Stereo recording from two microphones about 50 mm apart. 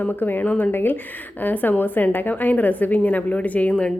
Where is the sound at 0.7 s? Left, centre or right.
Left.